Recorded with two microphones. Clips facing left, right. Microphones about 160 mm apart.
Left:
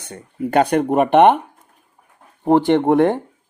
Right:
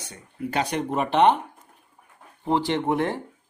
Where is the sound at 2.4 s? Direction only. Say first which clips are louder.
Left 9 dB; 50° left (ahead or behind).